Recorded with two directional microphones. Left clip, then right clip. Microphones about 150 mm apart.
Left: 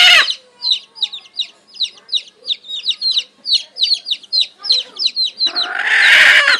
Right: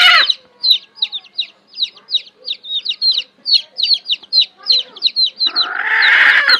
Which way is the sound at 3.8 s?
25° right (ahead or behind).